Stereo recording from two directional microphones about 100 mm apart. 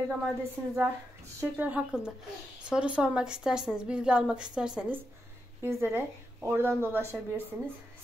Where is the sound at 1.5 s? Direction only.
15° right (ahead or behind).